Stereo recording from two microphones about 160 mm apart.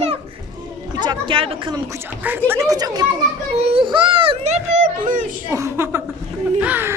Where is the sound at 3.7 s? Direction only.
30° right (ahead or behind); by 5.2 s 50° right (ahead or behind).